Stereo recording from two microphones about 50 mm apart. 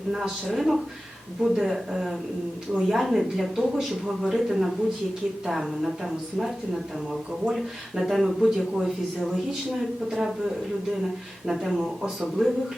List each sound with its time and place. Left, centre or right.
0.2 s speech: centre
7.5 s speech: centre
10.1 s speech: centre
11.4 s speech: centre